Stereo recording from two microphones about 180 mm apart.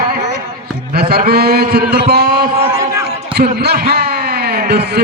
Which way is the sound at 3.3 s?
60° right (ahead or behind).